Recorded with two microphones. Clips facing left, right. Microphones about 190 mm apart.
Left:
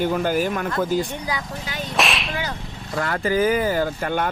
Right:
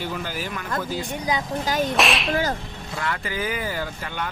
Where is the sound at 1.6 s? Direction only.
45° right (ahead or behind).